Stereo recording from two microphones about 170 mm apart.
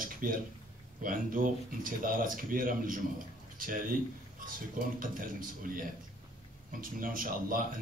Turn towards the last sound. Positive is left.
turn(degrees=-55)  # may be behind; listen again after turning